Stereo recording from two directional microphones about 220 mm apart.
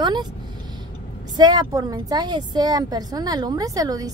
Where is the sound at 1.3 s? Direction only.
20° right (ahead or behind).